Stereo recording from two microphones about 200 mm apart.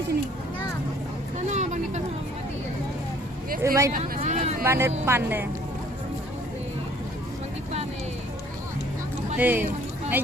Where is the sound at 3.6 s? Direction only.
15° right (ahead or behind).